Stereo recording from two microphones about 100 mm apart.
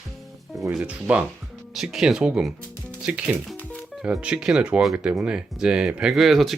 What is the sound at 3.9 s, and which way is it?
Speech, 5° right (ahead or behind).